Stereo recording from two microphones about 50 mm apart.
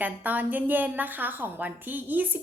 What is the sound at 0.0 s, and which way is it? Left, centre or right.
A woman's voice, right.